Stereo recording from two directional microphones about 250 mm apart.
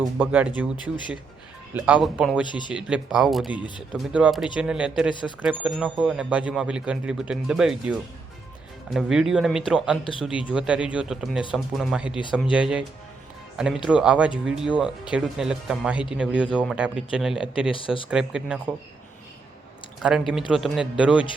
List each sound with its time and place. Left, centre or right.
0.0 s speech: centre
1.7 s speech: centre
2.5 s speech: centre
2.7 s speech: centre
10.0 s speech: left
10.5 s speech: centre
17.7 s speech: left
18.1 s speech: centre
20.0 s speech: centre